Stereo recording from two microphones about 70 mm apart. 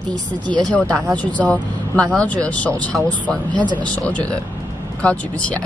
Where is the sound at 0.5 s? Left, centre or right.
Centre.